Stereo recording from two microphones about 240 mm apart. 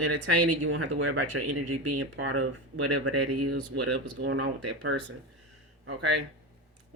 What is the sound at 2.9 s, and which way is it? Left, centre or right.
Speech, right.